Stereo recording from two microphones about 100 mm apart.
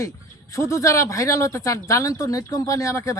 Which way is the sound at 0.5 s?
30° left (ahead or behind).